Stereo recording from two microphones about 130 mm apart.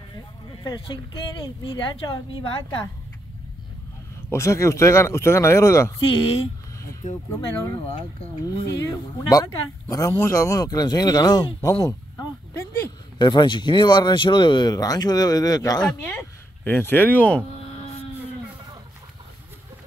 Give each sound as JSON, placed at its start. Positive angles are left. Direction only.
{"t": 0.7, "sound": "speech", "side_deg": 35}
{"t": 4.3, "sound": "speech", "side_deg": 20}
{"t": 5.9, "sound": "speech", "side_deg": 40}
{"t": 7.2, "sound": "speech", "side_deg": 25}
{"t": 9.3, "sound": "speech", "side_deg": 30}
{"t": 15.8, "sound": "speech", "side_deg": 5}
{"t": 16.2, "sound": "speech", "side_deg": 15}